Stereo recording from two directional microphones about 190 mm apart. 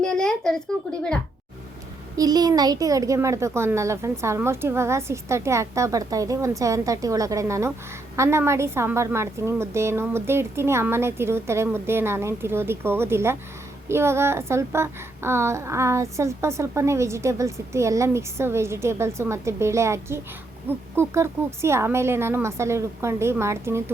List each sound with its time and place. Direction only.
0.0 s a child's voice: 5° left (ahead or behind)
2.1 s speech: 20° right (ahead or behind)